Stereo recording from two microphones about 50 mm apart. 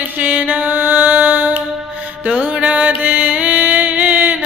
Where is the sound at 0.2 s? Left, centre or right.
Right.